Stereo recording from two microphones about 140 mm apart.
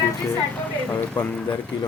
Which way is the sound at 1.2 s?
10° left (ahead or behind).